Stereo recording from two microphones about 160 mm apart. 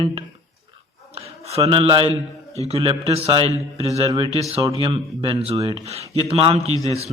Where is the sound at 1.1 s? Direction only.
40° right (ahead or behind).